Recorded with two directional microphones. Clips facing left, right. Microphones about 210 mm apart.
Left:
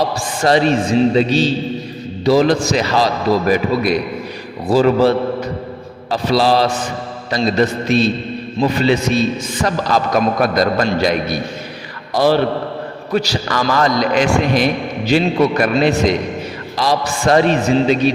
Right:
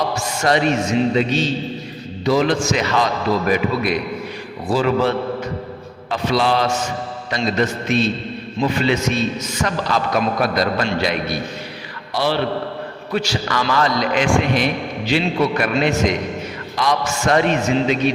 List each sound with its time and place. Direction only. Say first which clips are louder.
0.1 s a man's voice: left 3 dB; 35° left (ahead or behind)